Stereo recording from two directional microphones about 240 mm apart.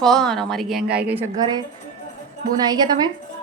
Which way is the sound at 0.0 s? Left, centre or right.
Centre.